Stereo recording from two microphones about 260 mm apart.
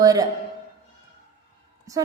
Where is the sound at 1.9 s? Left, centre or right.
Centre.